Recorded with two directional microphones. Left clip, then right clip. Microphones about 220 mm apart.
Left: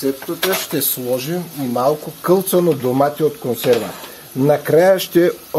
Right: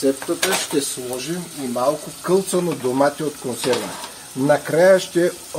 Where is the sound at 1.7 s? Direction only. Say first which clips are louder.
Left 3 dB; 50° left (ahead or behind).